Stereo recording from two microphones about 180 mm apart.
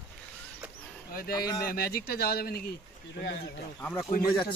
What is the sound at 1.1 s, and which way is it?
Speech, 55° left (ahead or behind).